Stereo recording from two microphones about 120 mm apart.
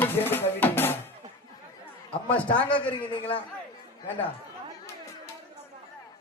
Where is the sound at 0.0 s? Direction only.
20° left (ahead or behind).